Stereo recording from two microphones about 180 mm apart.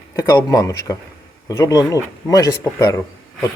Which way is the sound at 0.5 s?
20° left (ahead or behind).